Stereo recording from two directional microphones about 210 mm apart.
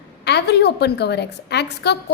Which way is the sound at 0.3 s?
50° left (ahead or behind).